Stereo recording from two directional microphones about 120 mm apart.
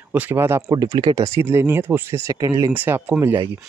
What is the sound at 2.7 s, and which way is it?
Speech, 15° right (ahead or behind).